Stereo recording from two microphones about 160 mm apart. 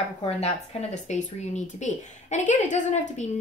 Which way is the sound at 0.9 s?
45° left (ahead or behind).